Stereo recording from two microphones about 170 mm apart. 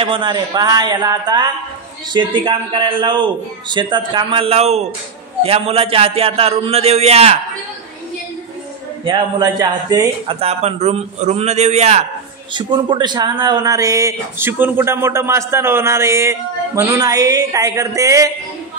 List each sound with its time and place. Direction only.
0.0 s a man's voice: 30° right (ahead or behind)
9.0 s speech: 25° right (ahead or behind)
10.4 s a man's voice: 40° right (ahead or behind)
12.5 s speech: 25° right (ahead or behind)